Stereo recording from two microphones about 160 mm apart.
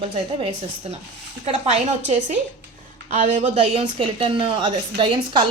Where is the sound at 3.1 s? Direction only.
50° right (ahead or behind).